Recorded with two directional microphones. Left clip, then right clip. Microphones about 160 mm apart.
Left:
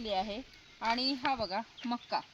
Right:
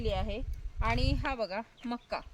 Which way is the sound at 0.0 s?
45° right (ahead or behind).